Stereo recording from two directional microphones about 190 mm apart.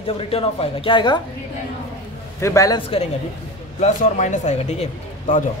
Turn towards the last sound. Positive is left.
turn(degrees=35)  # may be behind; listen again after turning